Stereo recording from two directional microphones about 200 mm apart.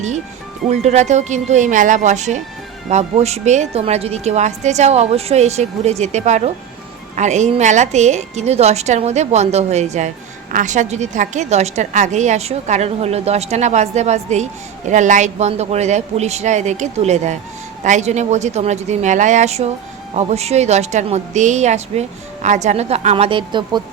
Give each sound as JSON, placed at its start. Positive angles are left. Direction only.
{"t": 0.7, "sound": "a woman's voice", "side_deg": -35}